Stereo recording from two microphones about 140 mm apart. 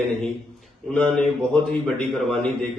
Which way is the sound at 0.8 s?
10° left (ahead or behind).